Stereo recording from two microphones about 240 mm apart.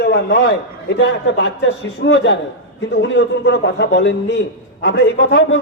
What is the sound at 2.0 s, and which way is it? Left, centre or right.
A man's voice, left.